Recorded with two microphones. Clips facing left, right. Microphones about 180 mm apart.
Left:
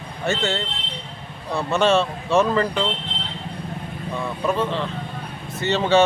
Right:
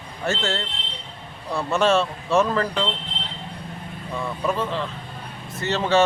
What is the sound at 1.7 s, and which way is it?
Speech, centre (ahead or behind).